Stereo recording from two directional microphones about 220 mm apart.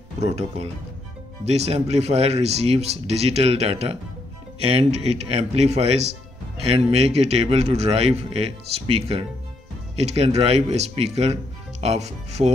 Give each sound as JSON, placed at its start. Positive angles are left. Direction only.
{"t": 0.2, "sound": "speech", "side_deg": -30}